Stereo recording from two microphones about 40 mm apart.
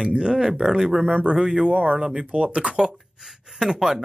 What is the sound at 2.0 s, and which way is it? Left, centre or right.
Speech, right.